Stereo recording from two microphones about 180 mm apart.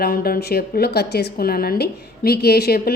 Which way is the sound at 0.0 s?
55° left (ahead or behind).